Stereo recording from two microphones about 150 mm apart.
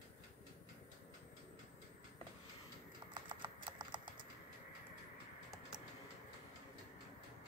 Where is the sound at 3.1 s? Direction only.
30° right (ahead or behind).